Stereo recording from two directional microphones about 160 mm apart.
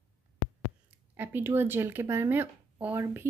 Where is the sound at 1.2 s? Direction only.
15° right (ahead or behind).